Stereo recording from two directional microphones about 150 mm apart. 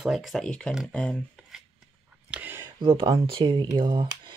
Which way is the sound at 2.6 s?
35° right (ahead or behind).